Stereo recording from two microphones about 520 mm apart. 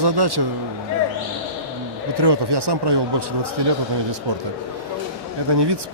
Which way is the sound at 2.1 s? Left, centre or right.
Right.